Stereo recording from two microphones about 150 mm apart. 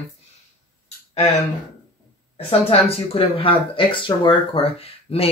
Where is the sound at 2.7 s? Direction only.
40° left (ahead or behind).